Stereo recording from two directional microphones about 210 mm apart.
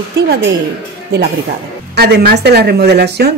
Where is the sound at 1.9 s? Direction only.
50° right (ahead or behind).